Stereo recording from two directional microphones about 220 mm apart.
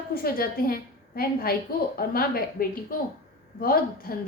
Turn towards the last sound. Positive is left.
turn(degrees=40)  # may be behind; listen again after turning